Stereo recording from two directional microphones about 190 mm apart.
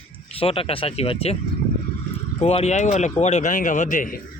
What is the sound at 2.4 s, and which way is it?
Speech, 35° left (ahead or behind).